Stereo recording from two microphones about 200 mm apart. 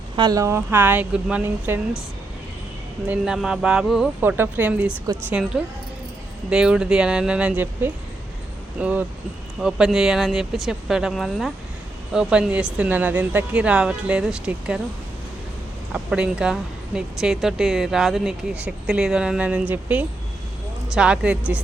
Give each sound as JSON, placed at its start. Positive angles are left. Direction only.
{"t": 0.2, "sound": "speech", "side_deg": -20}
{"t": 3.1, "sound": "speech", "side_deg": -5}
{"t": 5.1, "sound": "a woman's voice", "side_deg": -20}
{"t": 6.5, "sound": "speech", "side_deg": -5}
{"t": 15.9, "sound": "speech", "side_deg": -5}